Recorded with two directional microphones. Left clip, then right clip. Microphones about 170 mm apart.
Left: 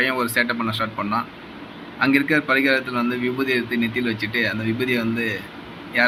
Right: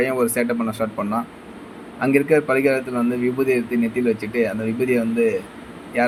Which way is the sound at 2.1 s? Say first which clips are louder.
Right 3 dB; 20° right (ahead or behind).